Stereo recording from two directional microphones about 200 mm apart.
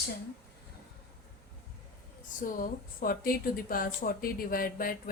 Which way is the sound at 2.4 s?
40° left (ahead or behind).